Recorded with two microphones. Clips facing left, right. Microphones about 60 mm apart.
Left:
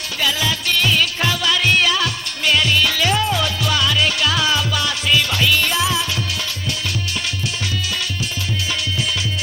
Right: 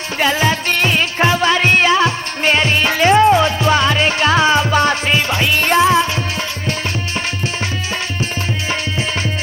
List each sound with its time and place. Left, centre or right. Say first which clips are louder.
0.2 s music: right 6 dB; right
5.5 s music: right 7 dB; right